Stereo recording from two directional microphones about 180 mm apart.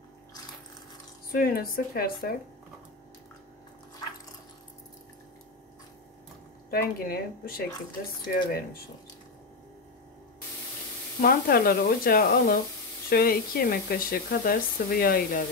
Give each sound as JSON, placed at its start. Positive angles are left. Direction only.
{"t": 1.3, "sound": "speech", "side_deg": 55}
{"t": 6.7, "sound": "speech", "side_deg": 55}
{"t": 11.1, "sound": "speech", "side_deg": 55}